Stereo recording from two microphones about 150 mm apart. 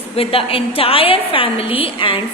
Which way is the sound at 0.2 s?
40° left (ahead or behind).